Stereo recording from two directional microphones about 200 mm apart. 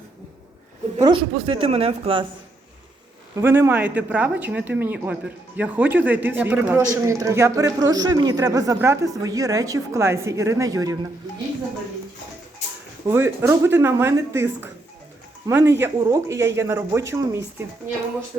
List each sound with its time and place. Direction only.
1.0 s speech: 25° right (ahead or behind)
3.3 s speech: 10° right (ahead or behind)
13.1 s speech: 15° right (ahead or behind)